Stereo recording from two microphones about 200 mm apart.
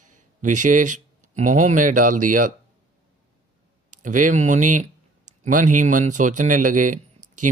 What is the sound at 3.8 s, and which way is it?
Speech, 40° right (ahead or behind).